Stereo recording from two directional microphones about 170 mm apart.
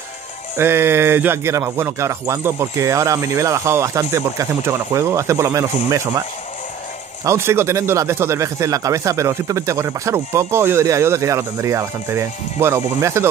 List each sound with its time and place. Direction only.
0.6 s speech: 15° right (ahead or behind)
7.2 s speech: 15° right (ahead or behind)